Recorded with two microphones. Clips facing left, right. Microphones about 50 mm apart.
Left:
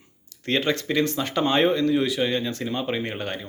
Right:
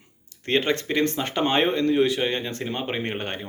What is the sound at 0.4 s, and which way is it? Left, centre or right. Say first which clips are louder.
Speech: right 1 dB; right.